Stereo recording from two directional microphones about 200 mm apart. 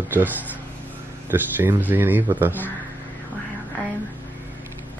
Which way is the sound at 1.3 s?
10° right (ahead or behind).